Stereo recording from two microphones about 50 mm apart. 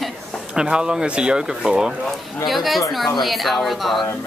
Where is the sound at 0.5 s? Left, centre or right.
Centre.